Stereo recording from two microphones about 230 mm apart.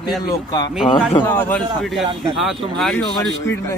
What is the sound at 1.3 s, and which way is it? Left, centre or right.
Speech, centre.